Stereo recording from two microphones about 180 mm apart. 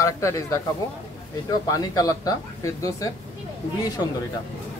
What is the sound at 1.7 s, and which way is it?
Speech, 20° left (ahead or behind).